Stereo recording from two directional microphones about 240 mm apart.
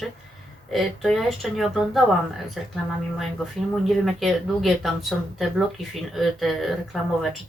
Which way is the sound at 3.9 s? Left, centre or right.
Centre.